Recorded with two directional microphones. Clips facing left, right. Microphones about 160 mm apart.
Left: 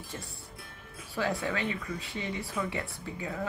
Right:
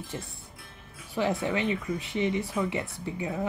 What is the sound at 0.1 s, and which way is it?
Speech, 20° right (ahead or behind).